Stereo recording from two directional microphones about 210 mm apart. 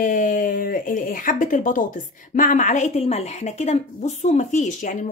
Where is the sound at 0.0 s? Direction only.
40° left (ahead or behind).